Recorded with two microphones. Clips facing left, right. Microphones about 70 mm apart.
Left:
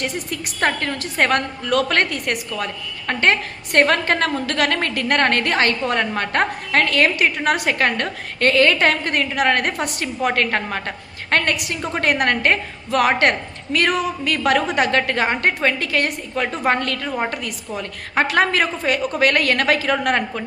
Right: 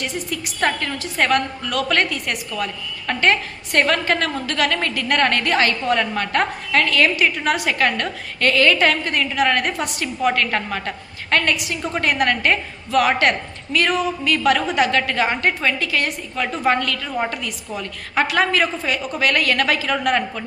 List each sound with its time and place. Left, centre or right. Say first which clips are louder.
0.0 s a woman's voice: left 1 dB; left